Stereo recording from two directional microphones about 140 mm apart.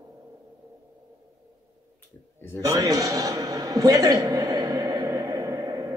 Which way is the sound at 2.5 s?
25° right (ahead or behind).